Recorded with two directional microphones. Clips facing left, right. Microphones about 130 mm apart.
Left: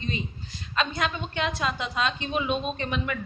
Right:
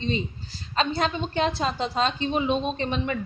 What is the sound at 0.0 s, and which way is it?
A woman's voice, 30° right (ahead or behind).